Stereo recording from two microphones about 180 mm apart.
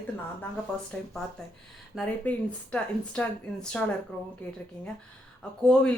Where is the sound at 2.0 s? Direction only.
5° left (ahead or behind).